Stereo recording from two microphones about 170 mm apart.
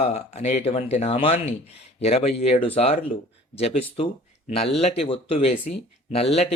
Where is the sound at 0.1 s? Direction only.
40° left (ahead or behind).